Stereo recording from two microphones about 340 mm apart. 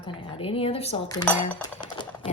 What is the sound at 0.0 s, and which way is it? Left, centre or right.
Speech, centre.